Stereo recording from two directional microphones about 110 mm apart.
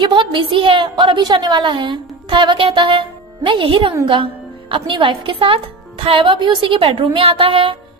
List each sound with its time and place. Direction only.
0.0 s a woman's voice: 45° right (ahead or behind)